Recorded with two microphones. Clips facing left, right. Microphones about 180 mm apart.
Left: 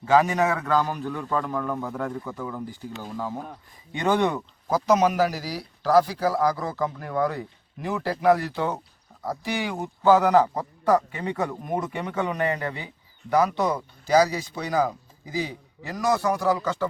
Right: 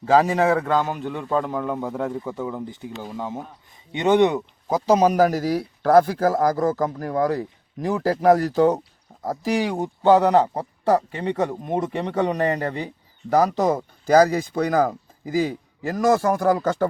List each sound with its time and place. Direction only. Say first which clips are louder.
0.0 s a man's voice: right 3 dB; 30° right (ahead or behind)
4.9 s a man's voice: right 5 dB; 40° right (ahead or behind)